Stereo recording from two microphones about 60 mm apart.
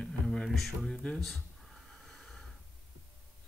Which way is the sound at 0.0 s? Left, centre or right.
Centre.